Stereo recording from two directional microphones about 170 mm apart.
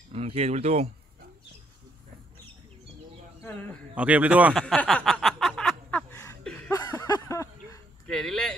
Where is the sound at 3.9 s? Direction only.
10° right (ahead or behind).